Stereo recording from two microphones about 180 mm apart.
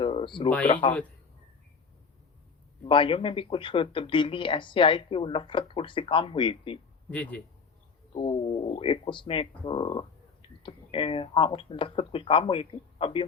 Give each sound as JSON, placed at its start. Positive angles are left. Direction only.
{"t": 0.0, "sound": "a sound", "side_deg": 30}
{"t": 0.7, "sound": "speech", "side_deg": 30}
{"t": 2.8, "sound": "speech", "side_deg": 30}
{"t": 7.1, "sound": "a man's voice", "side_deg": 10}
{"t": 8.1, "sound": "speech", "side_deg": 35}